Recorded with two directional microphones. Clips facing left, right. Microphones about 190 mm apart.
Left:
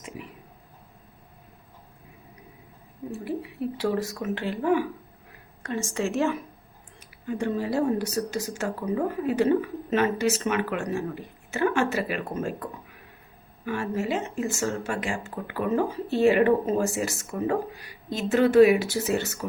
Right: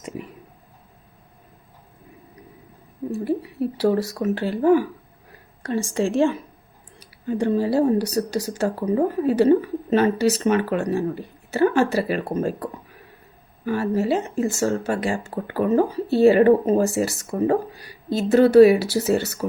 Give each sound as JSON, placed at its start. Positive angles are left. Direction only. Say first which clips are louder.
{"t": 3.8, "sound": "speech", "louder": "right 7 dB", "side_deg": -40}
{"t": 13.7, "sound": "speech", "louder": "right 6 dB", "side_deg": -35}